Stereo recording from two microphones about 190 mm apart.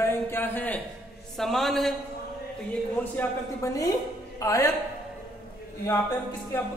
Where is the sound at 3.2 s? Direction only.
15° left (ahead or behind).